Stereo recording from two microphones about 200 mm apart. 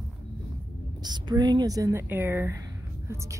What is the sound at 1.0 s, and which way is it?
Speech, 20° right (ahead or behind).